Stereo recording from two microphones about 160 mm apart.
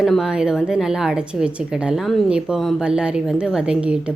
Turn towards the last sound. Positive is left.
turn(degrees=-5)  # may be behind; listen again after turning